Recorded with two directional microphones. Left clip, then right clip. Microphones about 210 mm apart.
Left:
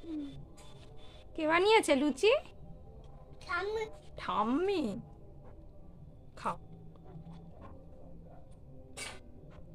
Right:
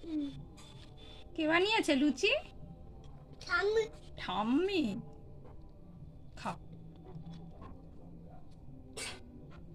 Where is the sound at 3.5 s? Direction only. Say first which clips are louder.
Right 4 dB; 15° left (ahead or behind).